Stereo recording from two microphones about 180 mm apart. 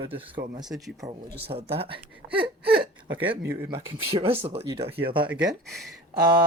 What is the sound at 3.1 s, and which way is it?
Speech, 10° right (ahead or behind).